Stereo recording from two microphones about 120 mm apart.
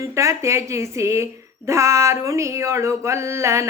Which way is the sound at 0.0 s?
25° right (ahead or behind).